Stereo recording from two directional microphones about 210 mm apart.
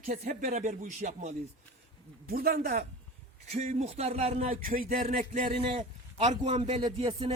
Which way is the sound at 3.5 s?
30° right (ahead or behind).